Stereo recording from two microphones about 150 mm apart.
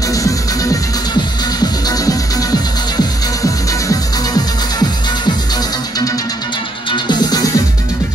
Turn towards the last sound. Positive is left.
turn(degrees=25)  # may be behind; listen again after turning